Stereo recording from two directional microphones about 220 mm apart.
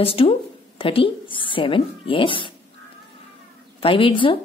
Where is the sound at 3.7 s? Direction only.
25° left (ahead or behind).